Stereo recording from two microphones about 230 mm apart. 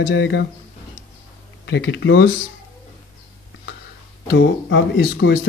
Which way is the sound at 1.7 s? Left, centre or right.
Left.